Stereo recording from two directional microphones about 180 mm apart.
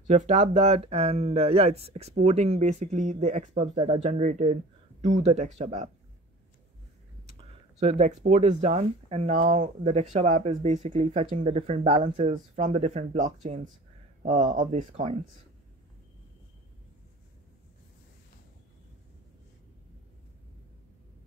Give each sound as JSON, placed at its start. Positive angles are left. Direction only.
{"t": 0.0, "sound": "speech", "side_deg": -40}
{"t": 7.2, "sound": "speech", "side_deg": -35}